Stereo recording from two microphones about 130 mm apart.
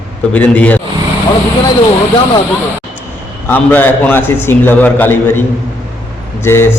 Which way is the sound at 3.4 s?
15° left (ahead or behind).